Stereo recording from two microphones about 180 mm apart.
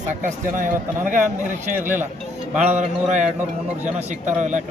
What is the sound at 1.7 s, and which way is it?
Speech, 10° right (ahead or behind).